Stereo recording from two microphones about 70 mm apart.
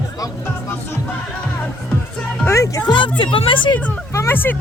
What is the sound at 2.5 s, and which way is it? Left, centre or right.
Speech, left.